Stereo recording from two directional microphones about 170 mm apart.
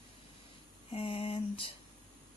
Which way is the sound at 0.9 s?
30° left (ahead or behind).